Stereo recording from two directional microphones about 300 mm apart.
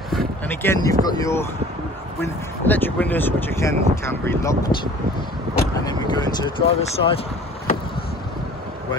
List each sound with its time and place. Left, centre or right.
0.1 s speech: centre
5.9 s speech: centre